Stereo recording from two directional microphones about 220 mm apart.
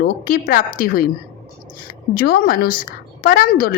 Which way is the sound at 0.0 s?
40° left (ahead or behind).